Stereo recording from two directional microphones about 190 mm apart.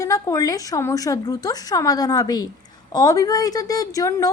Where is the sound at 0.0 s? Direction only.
20° left (ahead or behind).